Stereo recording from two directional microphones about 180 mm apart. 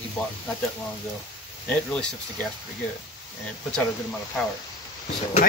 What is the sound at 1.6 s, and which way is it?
Speech, 5° left (ahead or behind).